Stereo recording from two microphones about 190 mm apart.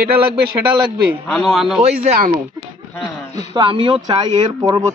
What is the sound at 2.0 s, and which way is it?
Speech, 40° right (ahead or behind).